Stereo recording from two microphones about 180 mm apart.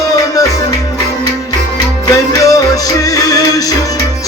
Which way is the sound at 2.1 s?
20° left (ahead or behind).